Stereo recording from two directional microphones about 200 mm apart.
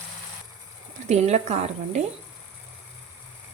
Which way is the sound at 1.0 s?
35° right (ahead or behind).